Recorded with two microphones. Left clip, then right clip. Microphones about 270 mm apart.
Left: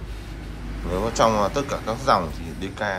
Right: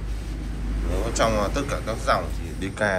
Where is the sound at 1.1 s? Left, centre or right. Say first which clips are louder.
Left 3 dB; centre.